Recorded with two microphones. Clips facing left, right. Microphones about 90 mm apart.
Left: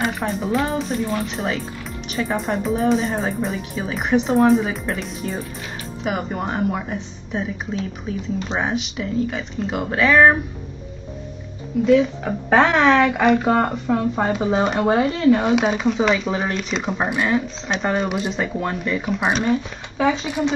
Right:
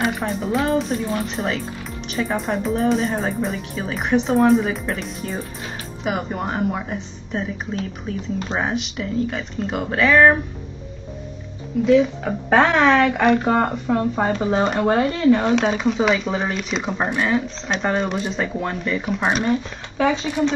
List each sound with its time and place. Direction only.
0.0 s speech: centre (ahead or behind)
11.8 s speech: centre (ahead or behind)